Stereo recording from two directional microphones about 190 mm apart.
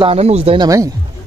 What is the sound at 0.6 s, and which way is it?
Speech, 15° right (ahead or behind).